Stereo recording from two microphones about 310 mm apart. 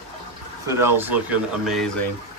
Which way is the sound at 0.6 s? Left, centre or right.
Centre.